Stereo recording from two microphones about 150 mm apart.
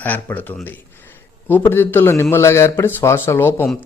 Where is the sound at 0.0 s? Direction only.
10° left (ahead or behind).